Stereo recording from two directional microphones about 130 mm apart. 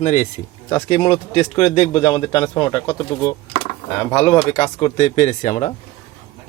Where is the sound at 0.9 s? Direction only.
40° left (ahead or behind).